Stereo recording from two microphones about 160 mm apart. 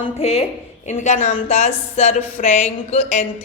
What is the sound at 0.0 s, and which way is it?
A woman's voice, 40° left (ahead or behind).